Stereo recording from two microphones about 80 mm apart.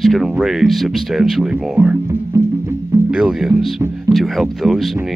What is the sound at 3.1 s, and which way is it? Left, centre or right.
Speech, centre.